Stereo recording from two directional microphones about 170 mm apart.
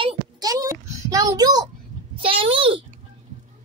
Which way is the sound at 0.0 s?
20° right (ahead or behind).